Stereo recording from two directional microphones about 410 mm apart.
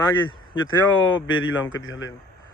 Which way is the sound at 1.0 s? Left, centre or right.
Left.